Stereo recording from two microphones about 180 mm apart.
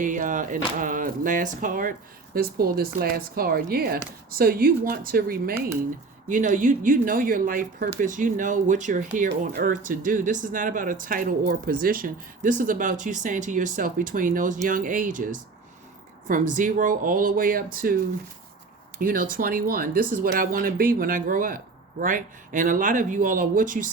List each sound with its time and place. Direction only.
0.0 s speech: 45° right (ahead or behind)
18.9 s speech: 50° right (ahead or behind)